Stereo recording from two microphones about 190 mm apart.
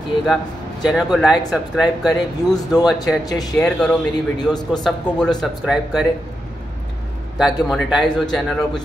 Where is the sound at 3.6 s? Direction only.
5° left (ahead or behind).